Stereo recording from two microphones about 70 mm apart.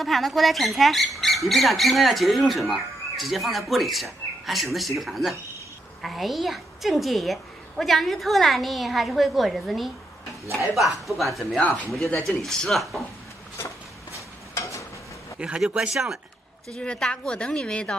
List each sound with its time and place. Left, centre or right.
0.0 s speech: centre
14.1 s a sound: left
15.3 s a man's voice: centre
16.7 s a woman's voice: centre